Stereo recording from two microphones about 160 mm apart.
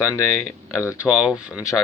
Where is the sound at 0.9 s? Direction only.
5° right (ahead or behind).